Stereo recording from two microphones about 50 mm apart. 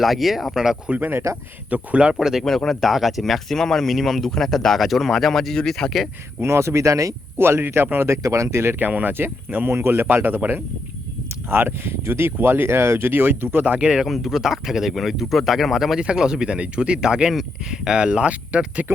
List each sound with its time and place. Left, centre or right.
0.0 s speech: centre
0.9 s speech: right
2.1 s speech: centre
2.4 s speech: centre
6.4 s speech: right
7.3 s speech: right
7.9 s speech: right
8.8 s speech: right
9.7 s speech: right
10.2 s speech: right
13.1 s speech: right
13.7 s speech: centre
16.0 s speech: centre
18.0 s speech: right